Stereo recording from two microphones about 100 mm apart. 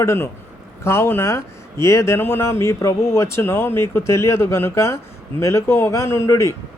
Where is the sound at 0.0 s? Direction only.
25° left (ahead or behind).